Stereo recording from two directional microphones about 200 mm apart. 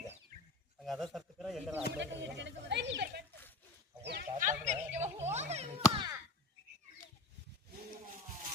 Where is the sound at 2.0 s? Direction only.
60° right (ahead or behind).